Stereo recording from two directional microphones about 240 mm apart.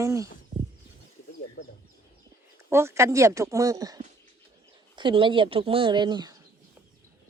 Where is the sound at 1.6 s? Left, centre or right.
Left.